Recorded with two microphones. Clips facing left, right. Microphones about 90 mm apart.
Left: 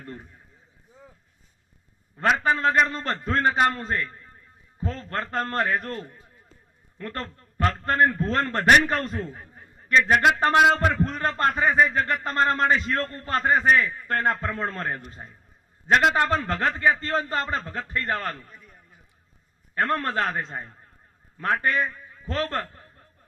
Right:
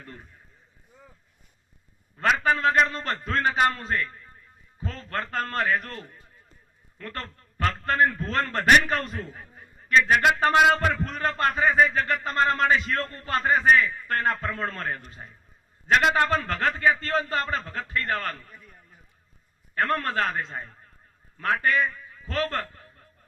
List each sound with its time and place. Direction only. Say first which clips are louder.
0.0 s a sound: left 5 dB; 35° left (ahead or behind)
2.1 s a sound: left 1 dB; 35° left (ahead or behind)
2.5 s a man's voice: right 1 dB; 30° left (ahead or behind)
2.8 s a man's voice: even; 45° left (ahead or behind)
3.1 s a man's voice: left 2 dB; 25° left (ahead or behind)
19.7 s a man's voice: left 1 dB; 30° left (ahead or behind)